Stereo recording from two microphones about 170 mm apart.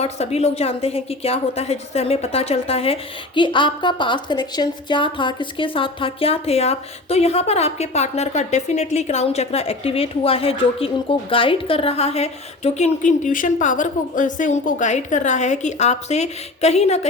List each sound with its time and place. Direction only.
0.0 s a woman's voice: 40° left (ahead or behind)